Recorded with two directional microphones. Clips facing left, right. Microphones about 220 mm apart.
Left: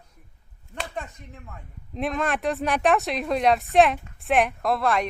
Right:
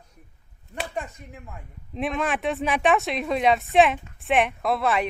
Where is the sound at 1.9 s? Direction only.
Centre (ahead or behind).